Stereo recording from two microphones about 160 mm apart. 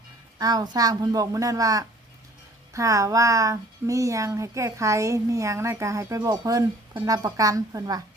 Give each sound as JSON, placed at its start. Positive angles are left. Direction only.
{"t": 0.3, "sound": "speech", "side_deg": -25}